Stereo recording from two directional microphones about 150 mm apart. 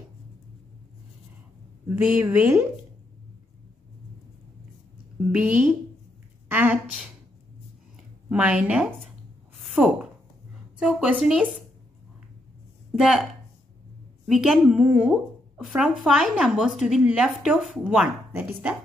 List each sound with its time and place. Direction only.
2.0 s speech: 15° right (ahead or behind)
5.3 s speech: 5° right (ahead or behind)
8.3 s speech: 10° right (ahead or behind)
10.8 s speech: 5° right (ahead or behind)
12.9 s speech: centre (ahead or behind)
14.2 s speech: centre (ahead or behind)